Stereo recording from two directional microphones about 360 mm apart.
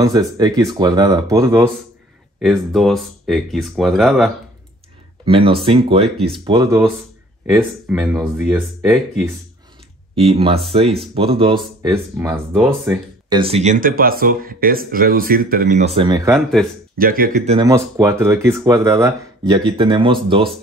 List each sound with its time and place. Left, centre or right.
0.0 s speech: centre
5.2 s speech: centre
10.1 s speech: centre
16.6 s speech: centre
17.0 s speech: right
17.6 s speech: centre